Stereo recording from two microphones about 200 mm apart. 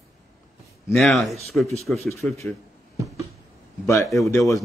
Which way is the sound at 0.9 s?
Centre (ahead or behind).